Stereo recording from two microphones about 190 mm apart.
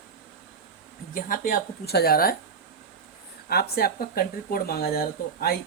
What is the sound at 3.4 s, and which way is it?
Speech, 55° left (ahead or behind).